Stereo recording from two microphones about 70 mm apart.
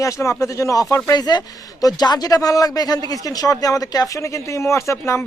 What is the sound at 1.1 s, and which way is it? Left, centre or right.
Speech, left.